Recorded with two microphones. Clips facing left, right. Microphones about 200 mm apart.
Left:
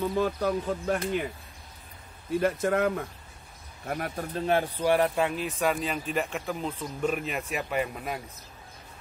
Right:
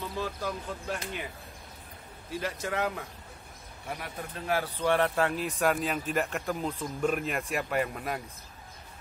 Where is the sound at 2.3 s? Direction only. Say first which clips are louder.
Left 8 dB; 55° left (ahead or behind).